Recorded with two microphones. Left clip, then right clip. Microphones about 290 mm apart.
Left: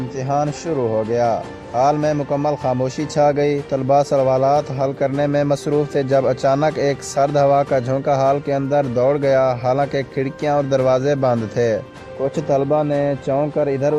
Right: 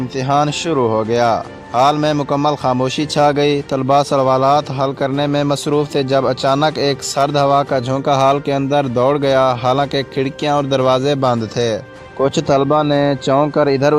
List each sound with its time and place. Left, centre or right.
0.3 s speech: right
8.0 s speech: right
10.8 s speech: right
12.2 s speech: right